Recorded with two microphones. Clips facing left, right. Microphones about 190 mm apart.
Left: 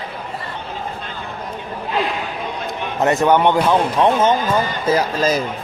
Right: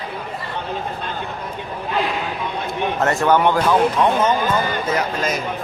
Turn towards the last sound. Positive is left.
turn(degrees=30)  # may be behind; listen again after turning